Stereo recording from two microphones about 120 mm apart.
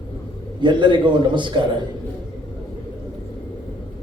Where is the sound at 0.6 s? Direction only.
40° right (ahead or behind).